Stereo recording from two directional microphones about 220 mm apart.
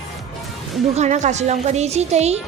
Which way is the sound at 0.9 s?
30° right (ahead or behind).